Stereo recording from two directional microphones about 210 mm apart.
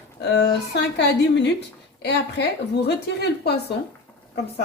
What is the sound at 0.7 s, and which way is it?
A woman's voice, 55° left (ahead or behind).